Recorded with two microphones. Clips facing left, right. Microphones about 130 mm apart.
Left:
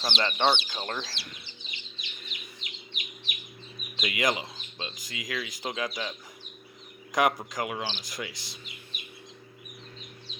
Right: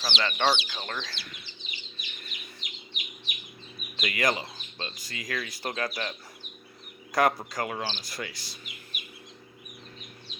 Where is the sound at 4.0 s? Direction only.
15° left (ahead or behind).